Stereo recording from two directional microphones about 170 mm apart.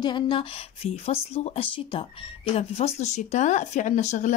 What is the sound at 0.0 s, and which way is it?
Speech, 30° left (ahead or behind).